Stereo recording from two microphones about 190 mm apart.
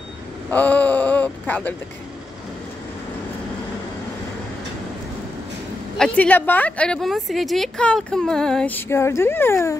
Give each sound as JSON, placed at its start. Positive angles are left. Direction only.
{"t": 0.5, "sound": "speech", "side_deg": 10}
{"t": 5.9, "sound": "a woman's voice", "side_deg": 5}